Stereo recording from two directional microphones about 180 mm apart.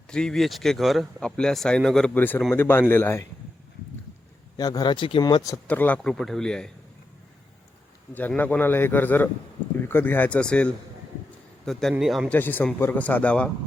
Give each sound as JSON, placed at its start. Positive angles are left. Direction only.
{"t": 0.1, "sound": "a man's voice", "side_deg": 5}
{"t": 4.5, "sound": "speech", "side_deg": 20}
{"t": 5.6, "sound": "speech", "side_deg": 10}
{"t": 8.1, "sound": "a man's voice", "side_deg": 10}
{"t": 12.4, "sound": "a man's voice", "side_deg": 10}